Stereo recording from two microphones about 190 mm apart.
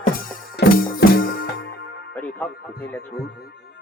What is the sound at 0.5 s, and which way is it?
Music, 55° left (ahead or behind).